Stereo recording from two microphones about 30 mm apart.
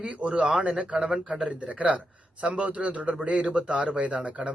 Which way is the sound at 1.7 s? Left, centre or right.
Right.